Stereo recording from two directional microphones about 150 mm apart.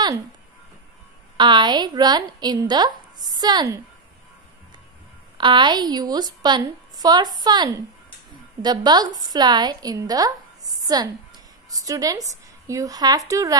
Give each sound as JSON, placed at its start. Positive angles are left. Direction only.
{"t": 1.3, "sound": "a woman's voice", "side_deg": -30}
{"t": 5.4, "sound": "a woman's voice", "side_deg": -30}